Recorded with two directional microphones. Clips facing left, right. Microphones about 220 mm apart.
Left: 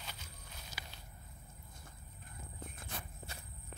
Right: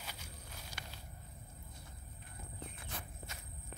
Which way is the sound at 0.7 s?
10° right (ahead or behind).